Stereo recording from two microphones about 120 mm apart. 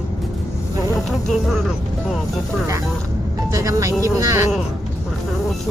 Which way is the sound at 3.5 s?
30° right (ahead or behind).